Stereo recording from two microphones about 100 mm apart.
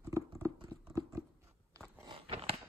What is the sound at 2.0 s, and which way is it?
Biting, 55° right (ahead or behind).